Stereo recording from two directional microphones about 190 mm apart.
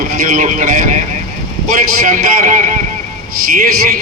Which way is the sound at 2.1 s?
45° right (ahead or behind).